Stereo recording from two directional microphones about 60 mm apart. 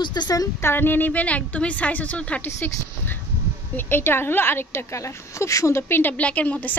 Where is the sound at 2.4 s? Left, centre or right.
Left.